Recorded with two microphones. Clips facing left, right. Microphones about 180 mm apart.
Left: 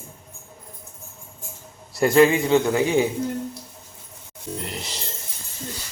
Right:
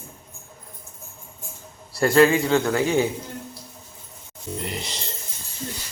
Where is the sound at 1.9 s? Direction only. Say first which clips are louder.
Left 1 dB; 20° left (ahead or behind).